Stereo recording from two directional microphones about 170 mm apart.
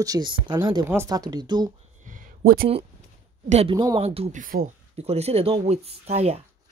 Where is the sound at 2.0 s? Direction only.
55° right (ahead or behind).